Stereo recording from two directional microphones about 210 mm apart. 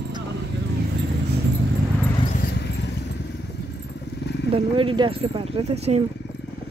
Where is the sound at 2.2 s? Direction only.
40° left (ahead or behind).